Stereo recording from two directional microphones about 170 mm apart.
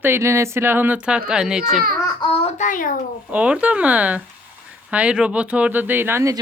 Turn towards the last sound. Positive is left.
turn(degrees=-15)  # may be behind; listen again after turning